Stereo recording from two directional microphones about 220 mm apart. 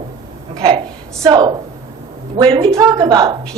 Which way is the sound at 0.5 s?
20° right (ahead or behind).